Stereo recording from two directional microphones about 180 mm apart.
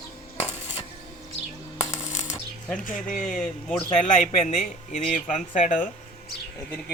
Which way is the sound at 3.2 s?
5° left (ahead or behind).